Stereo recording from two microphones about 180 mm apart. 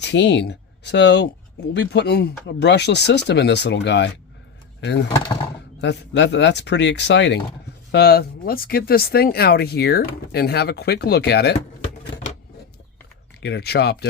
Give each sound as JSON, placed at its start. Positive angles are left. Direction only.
{"t": 0.0, "sound": "speech", "side_deg": 75}
{"t": 5.8, "sound": "speech", "side_deg": 70}
{"t": 7.9, "sound": "speech", "side_deg": 60}
{"t": 13.4, "sound": "speech", "side_deg": 65}